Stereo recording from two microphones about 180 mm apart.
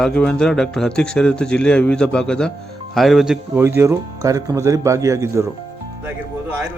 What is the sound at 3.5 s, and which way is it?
Speech, 15° right (ahead or behind).